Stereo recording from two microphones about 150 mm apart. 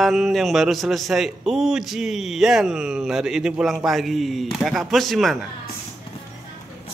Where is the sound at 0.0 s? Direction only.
Centre (ahead or behind).